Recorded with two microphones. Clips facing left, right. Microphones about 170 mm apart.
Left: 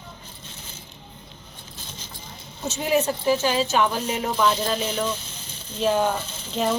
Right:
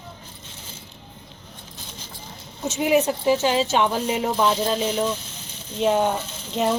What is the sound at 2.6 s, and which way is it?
Speech, 15° right (ahead or behind).